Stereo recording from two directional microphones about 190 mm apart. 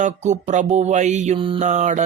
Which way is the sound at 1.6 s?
40° right (ahead or behind).